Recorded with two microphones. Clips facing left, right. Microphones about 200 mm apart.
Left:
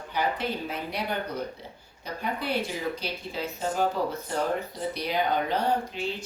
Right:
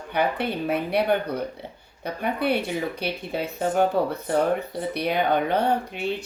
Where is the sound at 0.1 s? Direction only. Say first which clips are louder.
Right 4 dB; 60° right (ahead or behind).